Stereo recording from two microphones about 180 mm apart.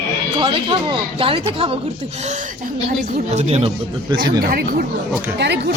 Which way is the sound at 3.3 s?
40° right (ahead or behind).